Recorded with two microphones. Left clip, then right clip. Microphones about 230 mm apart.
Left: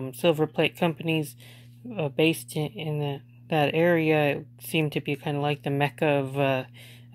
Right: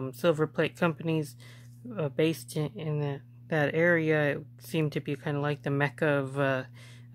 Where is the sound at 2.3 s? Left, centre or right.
Right.